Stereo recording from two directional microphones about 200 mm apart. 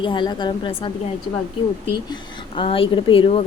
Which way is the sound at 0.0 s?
25° left (ahead or behind).